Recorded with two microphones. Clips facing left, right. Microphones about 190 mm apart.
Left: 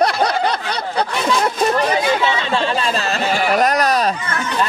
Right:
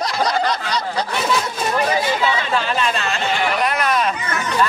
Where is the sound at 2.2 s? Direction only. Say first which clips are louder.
Left 1 dB; 30° left (ahead or behind).